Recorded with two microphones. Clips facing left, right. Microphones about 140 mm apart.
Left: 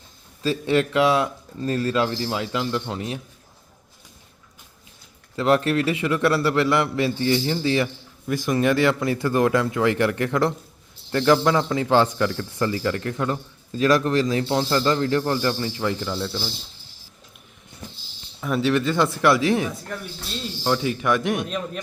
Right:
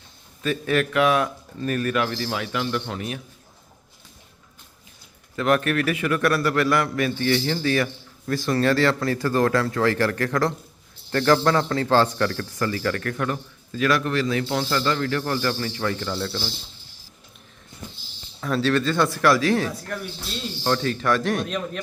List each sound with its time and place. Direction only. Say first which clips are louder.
0.4 s a man's voice: left 2 dB; 25° left (ahead or behind)
5.4 s a man's voice: left 2 dB; 25° left (ahead or behind)
16.0 s a man's voice: even; centre (ahead or behind)
18.3 s a man's voice: left 1 dB; 15° left (ahead or behind)